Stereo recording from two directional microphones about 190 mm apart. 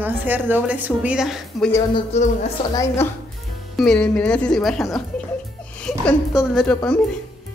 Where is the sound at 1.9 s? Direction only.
35° left (ahead or behind).